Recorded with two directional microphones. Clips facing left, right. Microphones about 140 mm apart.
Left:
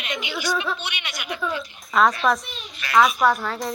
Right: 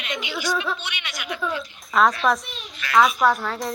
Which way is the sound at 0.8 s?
15° left (ahead or behind).